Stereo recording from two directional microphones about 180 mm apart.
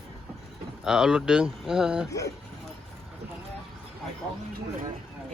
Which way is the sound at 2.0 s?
15° left (ahead or behind).